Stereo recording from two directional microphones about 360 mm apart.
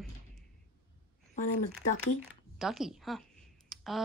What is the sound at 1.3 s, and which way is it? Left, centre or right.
Speech, left.